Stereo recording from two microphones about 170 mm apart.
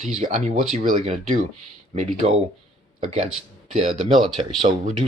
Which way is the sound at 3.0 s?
45° right (ahead or behind).